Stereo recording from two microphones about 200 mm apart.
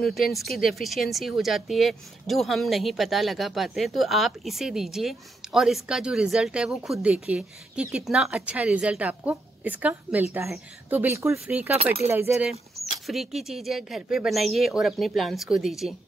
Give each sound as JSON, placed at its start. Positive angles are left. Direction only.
{"t": 0.0, "sound": "a woman's voice", "side_deg": 0}
{"t": 11.7, "sound": "speech", "side_deg": -30}
{"t": 12.1, "sound": "a woman's voice", "side_deg": -10}